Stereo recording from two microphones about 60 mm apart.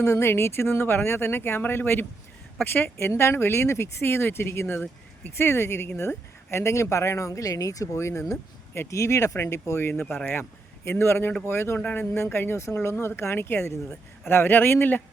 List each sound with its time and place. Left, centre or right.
0.0 s speech: left
3.1 s speech: left
7.9 s speech: left
11.8 s speech: left
12.1 s speech: left